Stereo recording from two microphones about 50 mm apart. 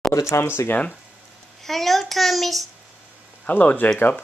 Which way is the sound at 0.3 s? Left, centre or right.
Left.